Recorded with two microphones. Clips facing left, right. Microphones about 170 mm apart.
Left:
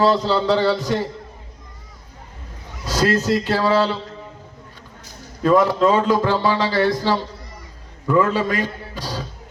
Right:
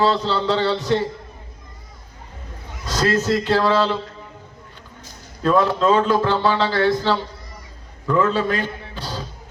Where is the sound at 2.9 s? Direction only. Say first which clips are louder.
Left 2 dB; 10° left (ahead or behind).